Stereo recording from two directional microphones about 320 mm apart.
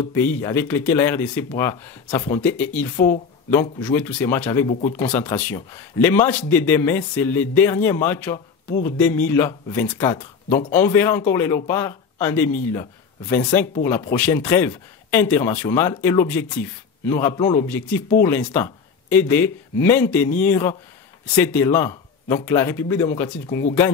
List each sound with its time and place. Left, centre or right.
0.2 s speech: centre